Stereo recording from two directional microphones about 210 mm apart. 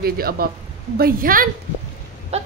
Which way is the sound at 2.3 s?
30° right (ahead or behind).